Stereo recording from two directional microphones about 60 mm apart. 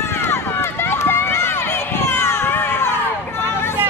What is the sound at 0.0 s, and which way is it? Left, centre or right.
Run, left.